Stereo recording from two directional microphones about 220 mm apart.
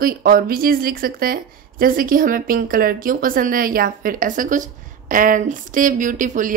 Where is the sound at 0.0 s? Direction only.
40° right (ahead or behind).